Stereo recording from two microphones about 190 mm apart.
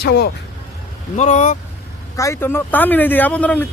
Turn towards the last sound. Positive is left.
turn(degrees=10)  # may be behind; listen again after turning